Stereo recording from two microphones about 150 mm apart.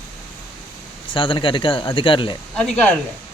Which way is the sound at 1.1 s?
35° left (ahead or behind).